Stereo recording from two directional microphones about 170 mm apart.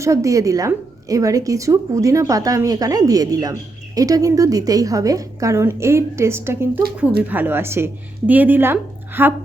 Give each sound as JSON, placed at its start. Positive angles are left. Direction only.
{"t": 0.0, "sound": "a woman's voice", "side_deg": -20}